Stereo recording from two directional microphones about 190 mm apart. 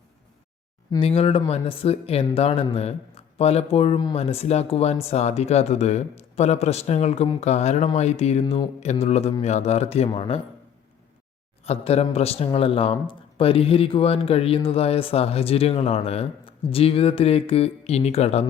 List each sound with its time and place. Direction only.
0.9 s speech: 30° left (ahead or behind)
11.6 s speech: 35° left (ahead or behind)